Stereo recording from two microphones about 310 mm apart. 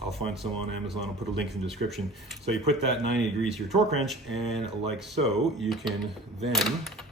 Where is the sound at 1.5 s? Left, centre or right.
Centre.